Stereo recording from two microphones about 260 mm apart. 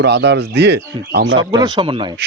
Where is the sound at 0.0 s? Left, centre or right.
Right.